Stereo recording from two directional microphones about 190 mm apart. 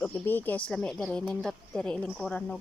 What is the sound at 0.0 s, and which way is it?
Speech, 10° left (ahead or behind).